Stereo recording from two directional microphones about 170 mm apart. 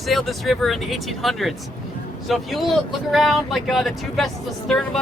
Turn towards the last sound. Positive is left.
turn(degrees=0)  # may be behind; listen again after turning